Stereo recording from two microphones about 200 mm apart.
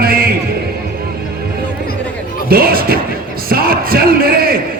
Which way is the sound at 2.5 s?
50° right (ahead or behind).